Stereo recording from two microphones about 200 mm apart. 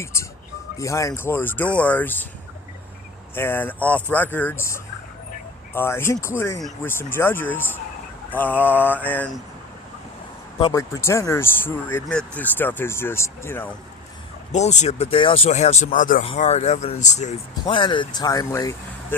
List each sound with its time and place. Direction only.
0.0 s speech: 15° left (ahead or behind)
3.3 s speech: 10° left (ahead or behind)
10.6 s speech: 20° left (ahead or behind)
14.5 s speech: 35° left (ahead or behind); by 18.8 s 15° left (ahead or behind)